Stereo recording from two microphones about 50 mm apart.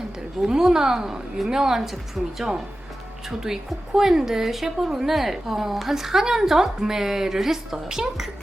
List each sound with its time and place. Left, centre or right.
0.4 s a woman's voice: centre